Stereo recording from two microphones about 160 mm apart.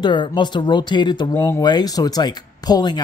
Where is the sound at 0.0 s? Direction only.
30° left (ahead or behind).